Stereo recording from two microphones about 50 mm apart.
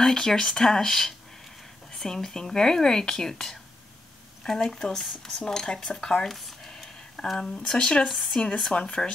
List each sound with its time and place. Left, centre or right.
0.0 s speech: centre
6.2 s a sound: centre
7.3 s speech: centre
8.1 s speech: centre
8.7 s speech: centre